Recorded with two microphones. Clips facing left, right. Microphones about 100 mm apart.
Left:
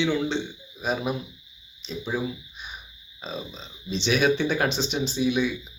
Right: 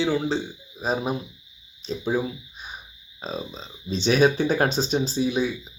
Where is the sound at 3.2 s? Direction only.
40° right (ahead or behind).